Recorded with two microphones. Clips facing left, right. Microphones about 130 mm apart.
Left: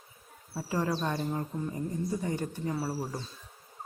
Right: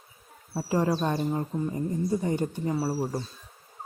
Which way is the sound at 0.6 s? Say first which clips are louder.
Right 5 dB; 25° right (ahead or behind).